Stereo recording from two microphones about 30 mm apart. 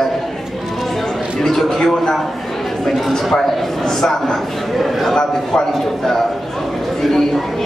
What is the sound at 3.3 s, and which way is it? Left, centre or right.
A man's voice, centre.